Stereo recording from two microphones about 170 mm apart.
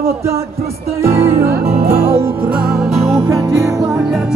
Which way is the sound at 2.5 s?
5° right (ahead or behind).